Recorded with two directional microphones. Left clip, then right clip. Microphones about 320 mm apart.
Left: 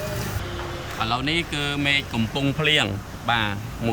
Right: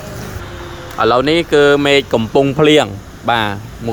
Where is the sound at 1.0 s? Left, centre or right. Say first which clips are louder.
Right 12 dB; centre.